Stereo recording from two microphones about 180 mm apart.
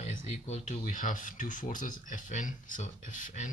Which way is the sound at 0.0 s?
40° left (ahead or behind).